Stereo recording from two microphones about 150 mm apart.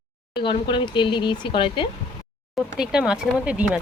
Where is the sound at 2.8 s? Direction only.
5° right (ahead or behind).